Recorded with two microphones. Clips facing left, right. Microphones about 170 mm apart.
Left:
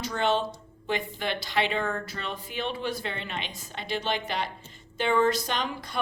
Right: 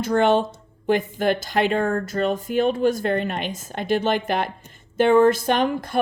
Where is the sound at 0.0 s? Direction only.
50° right (ahead or behind).